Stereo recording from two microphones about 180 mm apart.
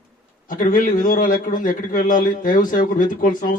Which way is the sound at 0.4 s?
50° left (ahead or behind).